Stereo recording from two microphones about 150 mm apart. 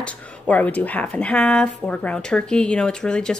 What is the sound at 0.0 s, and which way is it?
Speech, 10° left (ahead or behind).